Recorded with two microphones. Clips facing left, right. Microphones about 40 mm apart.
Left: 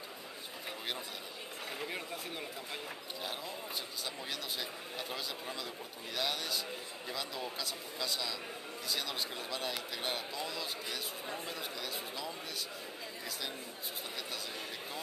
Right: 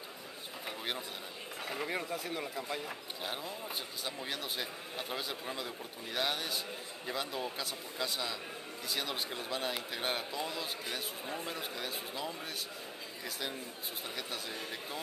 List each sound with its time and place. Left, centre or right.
4.0 s speech: right